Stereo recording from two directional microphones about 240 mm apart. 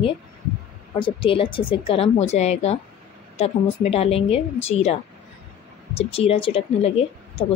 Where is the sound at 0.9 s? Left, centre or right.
Left.